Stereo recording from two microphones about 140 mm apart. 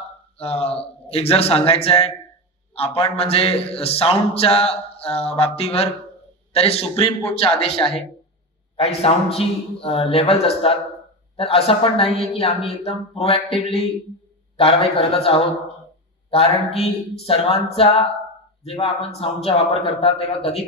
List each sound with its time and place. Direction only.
0.4 s a man's voice: 45° left (ahead or behind)
16.7 s a man's voice: 45° left (ahead or behind)